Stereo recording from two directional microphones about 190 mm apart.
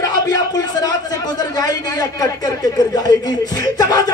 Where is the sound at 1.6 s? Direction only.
20° left (ahead or behind).